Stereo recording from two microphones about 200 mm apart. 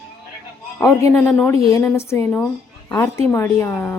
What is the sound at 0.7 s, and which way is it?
Speech, 15° left (ahead or behind).